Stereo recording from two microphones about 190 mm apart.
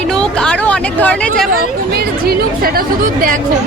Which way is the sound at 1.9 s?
55° right (ahead or behind).